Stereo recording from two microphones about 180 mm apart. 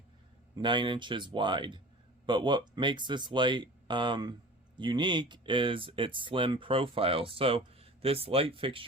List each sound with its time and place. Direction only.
0.5 s speech: 25° right (ahead or behind)